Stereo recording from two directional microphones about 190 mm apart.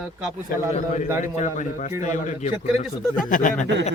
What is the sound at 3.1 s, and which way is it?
Speech, 45° left (ahead or behind).